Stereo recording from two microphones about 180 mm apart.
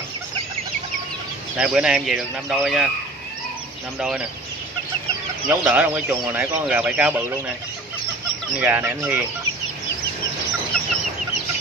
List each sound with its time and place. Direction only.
1.6 s speech: 5° right (ahead or behind)
5.5 s speech: 10° right (ahead or behind)
8.5 s speech: 10° right (ahead or behind)